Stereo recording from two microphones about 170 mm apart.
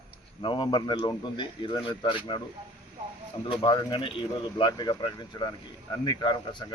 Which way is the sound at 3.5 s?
30° left (ahead or behind).